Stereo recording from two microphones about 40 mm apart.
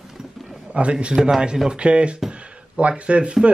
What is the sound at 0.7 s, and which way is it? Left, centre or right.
A man's voice, right.